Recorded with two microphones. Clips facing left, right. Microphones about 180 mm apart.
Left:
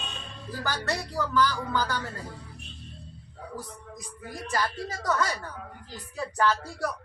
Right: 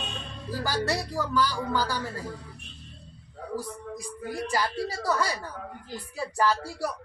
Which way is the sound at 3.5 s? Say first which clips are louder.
Right 7 dB; 35° right (ahead or behind).